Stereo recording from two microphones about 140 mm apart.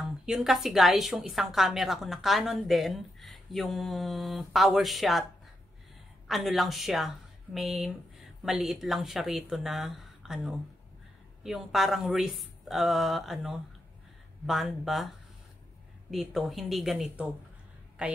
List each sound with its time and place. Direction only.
0.0 s a woman's voice: 5° right (ahead or behind)
6.2 s a woman's voice: centre (ahead or behind)